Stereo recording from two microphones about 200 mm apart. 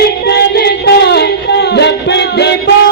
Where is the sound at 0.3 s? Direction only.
55° left (ahead or behind).